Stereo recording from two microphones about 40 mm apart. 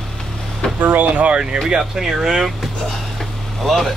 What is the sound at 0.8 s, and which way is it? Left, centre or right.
Speech, right.